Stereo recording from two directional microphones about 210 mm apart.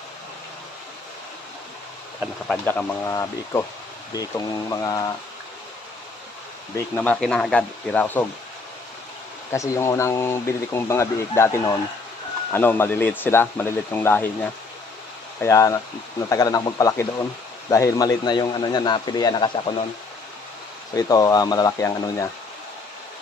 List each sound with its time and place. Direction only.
2.4 s speech: 5° left (ahead or behind)
7.0 s speech: 5° left (ahead or behind)
9.5 s speech: 15° left (ahead or behind)
15.4 s speech: 15° left (ahead or behind)
20.9 s speech: 15° left (ahead or behind)